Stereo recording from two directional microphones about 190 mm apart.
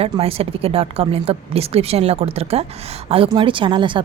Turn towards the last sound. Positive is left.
turn(degrees=-25)  # may be behind; listen again after turning